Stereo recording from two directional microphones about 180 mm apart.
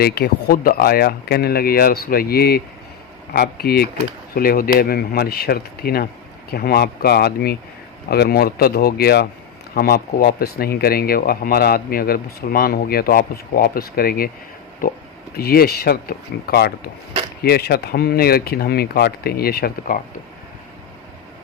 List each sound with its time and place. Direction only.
0.0 s speech: 65° left (ahead or behind)